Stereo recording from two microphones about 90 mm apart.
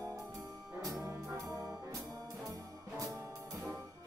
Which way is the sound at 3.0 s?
35° right (ahead or behind).